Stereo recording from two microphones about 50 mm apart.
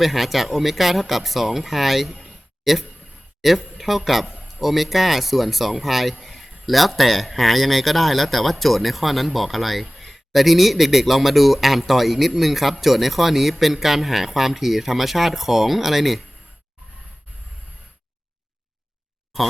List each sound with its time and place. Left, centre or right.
0.0 s speech: centre
4.3 s a sound: right
4.6 s speech: centre
19.3 s speech: centre